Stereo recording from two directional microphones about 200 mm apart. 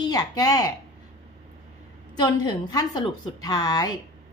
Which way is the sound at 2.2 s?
20° left (ahead or behind).